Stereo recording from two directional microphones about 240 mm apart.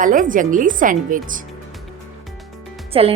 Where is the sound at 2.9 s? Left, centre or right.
Right.